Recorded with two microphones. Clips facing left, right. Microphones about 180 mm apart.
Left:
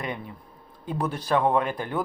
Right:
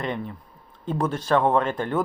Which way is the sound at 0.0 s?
10° left (ahead or behind).